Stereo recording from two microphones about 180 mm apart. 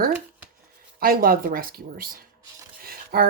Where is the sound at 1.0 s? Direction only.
55° right (ahead or behind).